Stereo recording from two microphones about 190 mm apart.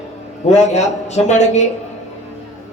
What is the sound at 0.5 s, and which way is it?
A man's voice, 35° left (ahead or behind).